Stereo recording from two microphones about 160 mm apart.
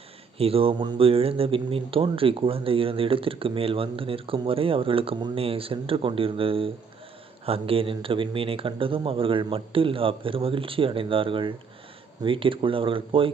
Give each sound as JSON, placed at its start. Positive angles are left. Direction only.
{"t": 0.3, "sound": "speech", "side_deg": -35}